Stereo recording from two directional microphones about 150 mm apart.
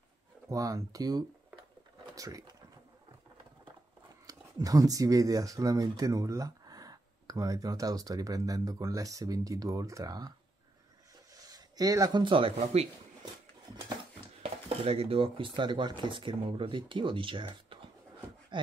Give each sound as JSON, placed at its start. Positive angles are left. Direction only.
{"t": 0.5, "sound": "speech", "side_deg": -20}
{"t": 4.3, "sound": "speech", "side_deg": -25}
{"t": 11.3, "sound": "speech", "side_deg": -25}
{"t": 14.4, "sound": "speech", "side_deg": -40}